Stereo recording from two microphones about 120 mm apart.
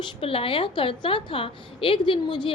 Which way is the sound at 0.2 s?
50° left (ahead or behind).